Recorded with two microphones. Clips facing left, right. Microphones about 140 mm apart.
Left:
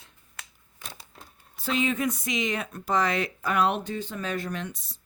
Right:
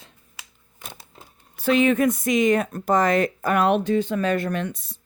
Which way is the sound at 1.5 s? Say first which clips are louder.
Right 8 dB; 65° right (ahead or behind).